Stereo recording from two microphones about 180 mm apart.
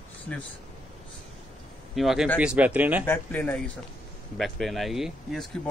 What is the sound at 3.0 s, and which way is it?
Speech, 10° left (ahead or behind).